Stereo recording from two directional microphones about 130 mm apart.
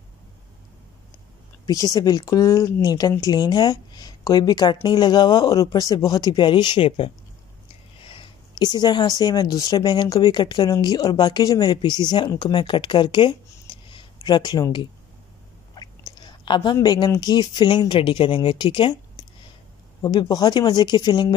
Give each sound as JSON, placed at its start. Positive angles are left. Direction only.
{"t": 1.7, "sound": "speech", "side_deg": 30}
{"t": 15.7, "sound": "chewing", "side_deg": 35}
{"t": 16.8, "sound": "speech", "side_deg": 35}